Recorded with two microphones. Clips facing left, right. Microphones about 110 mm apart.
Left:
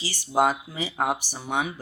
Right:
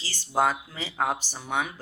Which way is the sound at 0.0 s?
15° left (ahead or behind).